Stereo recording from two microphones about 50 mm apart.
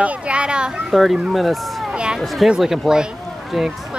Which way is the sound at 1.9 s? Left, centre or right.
Centre.